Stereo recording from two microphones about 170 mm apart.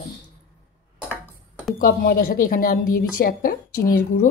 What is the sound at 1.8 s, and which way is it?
Speech, 60° left (ahead or behind).